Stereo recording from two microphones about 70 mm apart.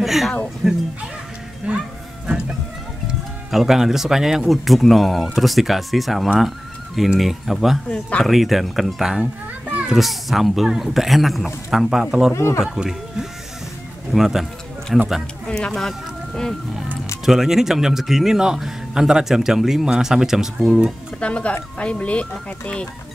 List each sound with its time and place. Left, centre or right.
0.0 s music: centre
0.6 s speech: centre
1.7 s music: centre
3.1 s speech: centre
7.9 s speech: centre
8.3 s speech: centre
9.2 s children playing: centre
9.9 s speech: centre
12.4 s speech: left
12.6 s speech: centre
15.4 s speech: centre
17.2 s speech: centre
21.2 s speech: centre